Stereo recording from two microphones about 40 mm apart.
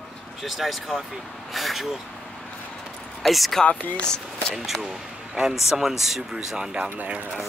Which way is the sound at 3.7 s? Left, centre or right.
Left.